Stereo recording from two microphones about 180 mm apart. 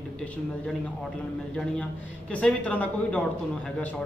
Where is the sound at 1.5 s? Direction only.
5° left (ahead or behind).